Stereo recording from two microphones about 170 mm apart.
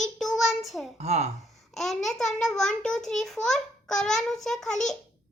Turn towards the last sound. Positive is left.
turn(degrees=0)  # may be behind; listen again after turning